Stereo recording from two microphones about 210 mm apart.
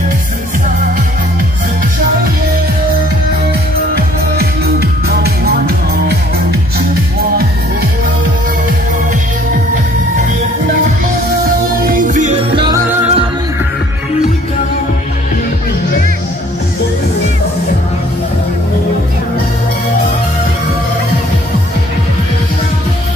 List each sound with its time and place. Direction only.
3.9 s music: 50° right (ahead or behind)
11.8 s music: 40° right (ahead or behind); by 12.8 s 20° right (ahead or behind)
12.8 s music: 10° right (ahead or behind)